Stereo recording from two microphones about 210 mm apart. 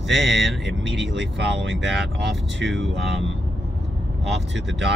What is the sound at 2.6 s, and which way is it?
Speech, 60° right (ahead or behind).